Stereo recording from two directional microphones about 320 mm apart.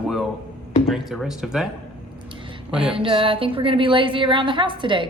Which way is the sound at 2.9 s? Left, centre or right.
Centre.